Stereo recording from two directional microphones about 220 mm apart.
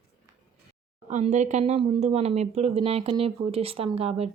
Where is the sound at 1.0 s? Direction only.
35° right (ahead or behind).